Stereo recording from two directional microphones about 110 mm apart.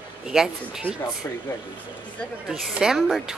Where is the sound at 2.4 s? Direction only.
5° right (ahead or behind).